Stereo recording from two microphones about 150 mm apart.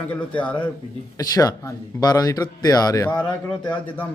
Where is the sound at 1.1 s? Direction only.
25° left (ahead or behind).